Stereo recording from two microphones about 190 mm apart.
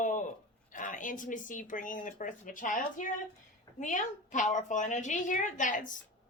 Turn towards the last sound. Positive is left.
turn(degrees=40)  # may be behind; listen again after turning